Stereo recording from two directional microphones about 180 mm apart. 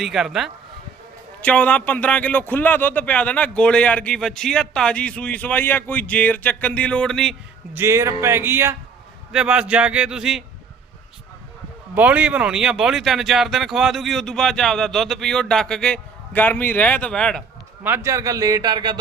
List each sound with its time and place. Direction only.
0.0 s a man's voice: centre (ahead or behind)
7.7 s speech: 15° right (ahead or behind)
11.9 s speech: 10° right (ahead or behind)
17.8 s a man's voice: 15° right (ahead or behind)